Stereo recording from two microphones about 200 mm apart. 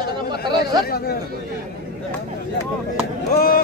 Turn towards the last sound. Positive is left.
turn(degrees=50)  # may be behind; listen again after turning